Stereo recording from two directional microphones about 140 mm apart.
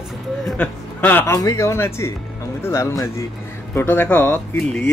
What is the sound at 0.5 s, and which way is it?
Speech, 15° left (ahead or behind).